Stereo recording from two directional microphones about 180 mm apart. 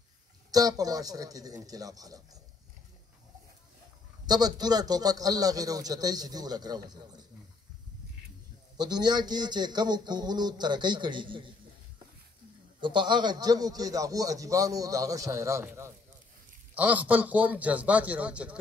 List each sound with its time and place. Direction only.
0.5 s a man's voice: 20° right (ahead or behind)
4.3 s a man's voice: 20° right (ahead or behind)
8.7 s a man's voice: 25° right (ahead or behind)
12.8 s a man's voice: 25° right (ahead or behind); by 18.6 s 5° right (ahead or behind)